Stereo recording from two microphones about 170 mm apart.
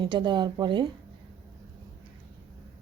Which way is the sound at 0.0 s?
25° right (ahead or behind).